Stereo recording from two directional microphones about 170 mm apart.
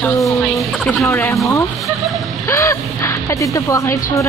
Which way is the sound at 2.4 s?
15° left (ahead or behind).